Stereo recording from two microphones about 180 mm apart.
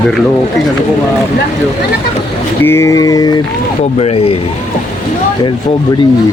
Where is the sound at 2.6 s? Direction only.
15° left (ahead or behind).